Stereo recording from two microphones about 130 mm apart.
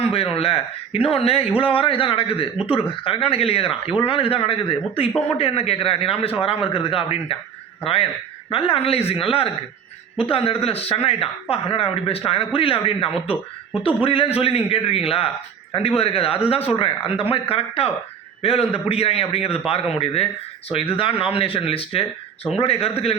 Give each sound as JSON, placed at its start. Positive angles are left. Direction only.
{"t": 0.1, "sound": "speech", "side_deg": 45}
{"t": 8.4, "sound": "speech", "side_deg": 45}